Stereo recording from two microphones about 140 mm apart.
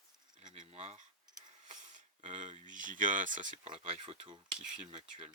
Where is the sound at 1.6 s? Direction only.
65° right (ahead or behind).